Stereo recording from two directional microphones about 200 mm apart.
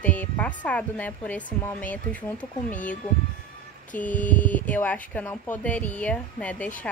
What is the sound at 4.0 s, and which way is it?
Speech, 10° left (ahead or behind).